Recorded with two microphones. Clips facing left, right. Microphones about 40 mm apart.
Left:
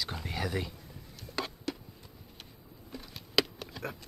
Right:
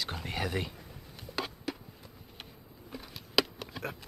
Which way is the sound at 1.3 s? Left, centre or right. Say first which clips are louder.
Even; centre.